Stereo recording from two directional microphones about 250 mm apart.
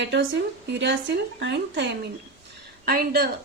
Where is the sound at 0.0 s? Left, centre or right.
Right.